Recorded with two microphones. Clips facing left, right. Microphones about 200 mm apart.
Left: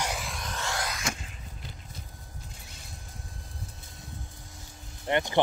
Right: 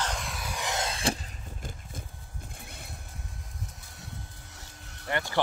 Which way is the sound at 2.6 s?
55° right (ahead or behind).